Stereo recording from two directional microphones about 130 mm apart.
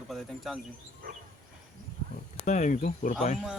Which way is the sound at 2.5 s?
75° left (ahead or behind).